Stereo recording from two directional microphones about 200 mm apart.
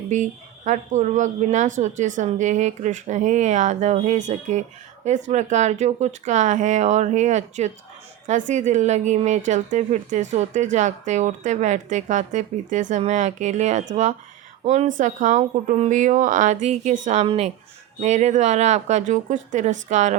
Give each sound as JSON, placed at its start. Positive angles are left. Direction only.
{"t": 0.1, "sound": "speech", "side_deg": -35}